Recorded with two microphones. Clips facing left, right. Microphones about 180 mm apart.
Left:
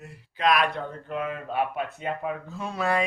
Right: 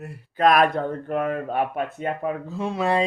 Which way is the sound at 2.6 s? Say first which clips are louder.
Right 4 dB; 25° right (ahead or behind).